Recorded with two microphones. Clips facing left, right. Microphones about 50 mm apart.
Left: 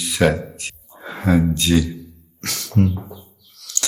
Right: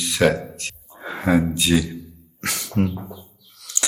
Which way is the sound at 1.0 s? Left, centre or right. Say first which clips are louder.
Left 1 dB; centre.